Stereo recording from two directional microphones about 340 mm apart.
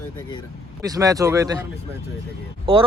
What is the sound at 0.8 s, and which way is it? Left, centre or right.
Speech, centre.